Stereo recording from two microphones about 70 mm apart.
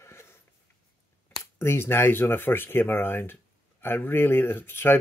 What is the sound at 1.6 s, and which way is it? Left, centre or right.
Speech, left.